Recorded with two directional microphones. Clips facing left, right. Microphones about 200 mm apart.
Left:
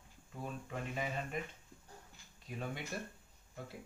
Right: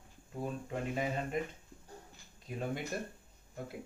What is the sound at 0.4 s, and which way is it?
Speech, 35° right (ahead or behind).